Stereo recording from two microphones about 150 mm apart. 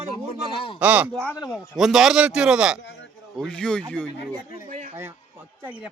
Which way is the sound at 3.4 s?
5° left (ahead or behind).